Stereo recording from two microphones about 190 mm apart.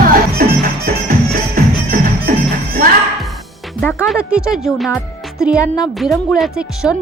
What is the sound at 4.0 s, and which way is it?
Music, 5° right (ahead or behind).